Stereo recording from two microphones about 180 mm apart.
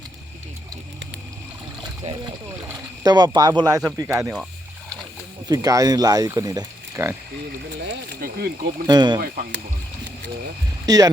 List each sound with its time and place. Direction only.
2.0 s speech: 40° right (ahead or behind)
3.0 s speech: 20° right (ahead or behind)
5.5 s speech: 20° right (ahead or behind)
8.1 s speech: 60° right (ahead or behind)
8.9 s speech: 25° right (ahead or behind)
9.2 s speech: 55° right (ahead or behind)
10.8 s speech: 20° right (ahead or behind)